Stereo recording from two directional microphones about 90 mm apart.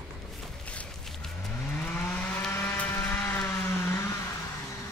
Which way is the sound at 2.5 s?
20° left (ahead or behind).